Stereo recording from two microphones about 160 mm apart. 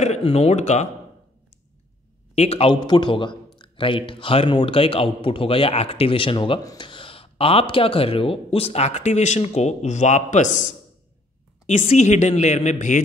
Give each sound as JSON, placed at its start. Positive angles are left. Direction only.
{"t": 0.0, "sound": "speech", "side_deg": 40}
{"t": 2.3, "sound": "a man's voice", "side_deg": 40}